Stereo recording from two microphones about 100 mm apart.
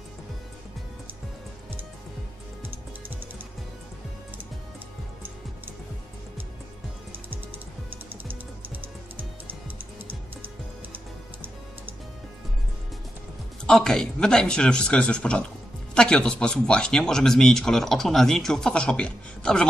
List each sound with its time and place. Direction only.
8.1 s music: 20° right (ahead or behind)
13.6 s speech: 5° left (ahead or behind)